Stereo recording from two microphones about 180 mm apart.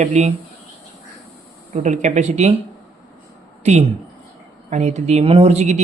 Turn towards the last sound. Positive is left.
turn(degrees=-40)  # may be behind; listen again after turning